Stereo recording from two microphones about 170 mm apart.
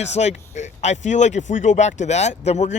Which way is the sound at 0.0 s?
40° left (ahead or behind).